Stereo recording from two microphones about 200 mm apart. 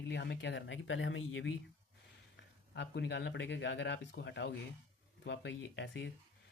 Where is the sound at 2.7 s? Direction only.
60° left (ahead or behind).